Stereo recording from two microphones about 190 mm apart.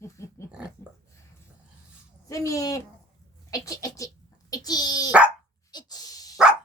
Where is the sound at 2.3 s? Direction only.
15° left (ahead or behind).